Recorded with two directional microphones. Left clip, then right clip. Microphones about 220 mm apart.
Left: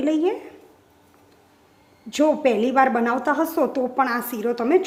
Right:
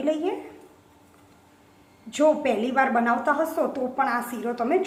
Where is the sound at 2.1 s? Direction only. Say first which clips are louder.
Left 2 dB; 30° left (ahead or behind).